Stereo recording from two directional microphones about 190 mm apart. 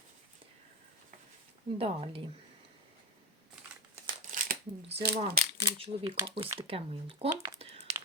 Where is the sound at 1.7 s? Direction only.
30° right (ahead or behind).